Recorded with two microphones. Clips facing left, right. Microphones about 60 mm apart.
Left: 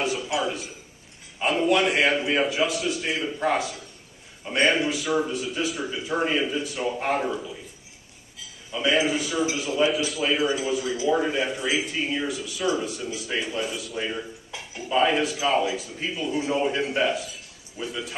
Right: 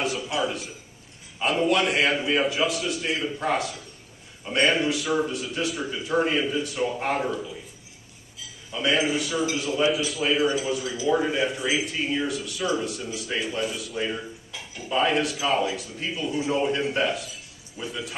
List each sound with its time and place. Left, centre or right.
0.4 s speech: centre
8.7 s a man's voice: centre